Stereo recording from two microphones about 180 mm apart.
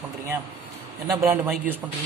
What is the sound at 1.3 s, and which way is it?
Speech, 10° right (ahead or behind).